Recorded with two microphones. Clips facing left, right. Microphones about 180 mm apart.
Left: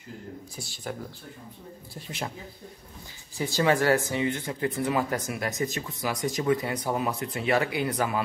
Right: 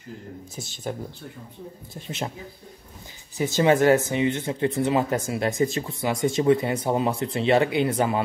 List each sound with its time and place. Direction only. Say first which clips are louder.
0.6 s speech: right 5 dB; 20° right (ahead or behind)
2.0 s speech: right 4 dB; 25° right (ahead or behind)
3.3 s speech: right 5 dB; 20° right (ahead or behind)